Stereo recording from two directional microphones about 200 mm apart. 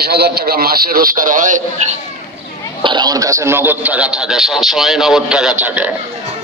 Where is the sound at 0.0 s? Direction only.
50° right (ahead or behind).